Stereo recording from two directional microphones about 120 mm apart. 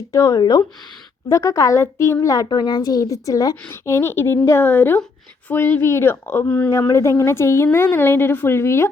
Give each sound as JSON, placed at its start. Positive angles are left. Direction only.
{"t": 0.1, "sound": "a woman's voice", "side_deg": 30}